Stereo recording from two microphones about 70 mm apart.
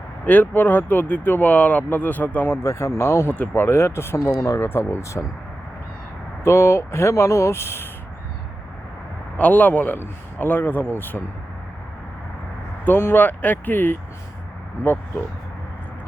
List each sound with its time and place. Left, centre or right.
0.3 s speech: left
2.6 s speech: left
4.2 s speech: left
4.6 s speech: left
6.4 s speech: left
9.4 s speech: left
12.8 s speech: left